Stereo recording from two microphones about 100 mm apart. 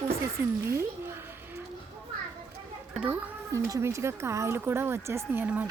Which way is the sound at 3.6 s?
30° right (ahead or behind).